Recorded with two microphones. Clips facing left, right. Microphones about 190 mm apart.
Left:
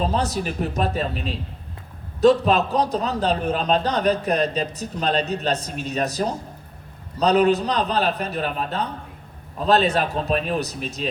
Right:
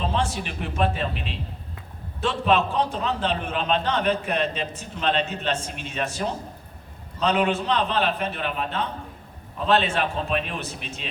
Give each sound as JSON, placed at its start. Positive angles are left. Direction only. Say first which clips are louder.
{"t": 0.0, "sound": "a man's voice", "louder": "left 3 dB", "side_deg": 40}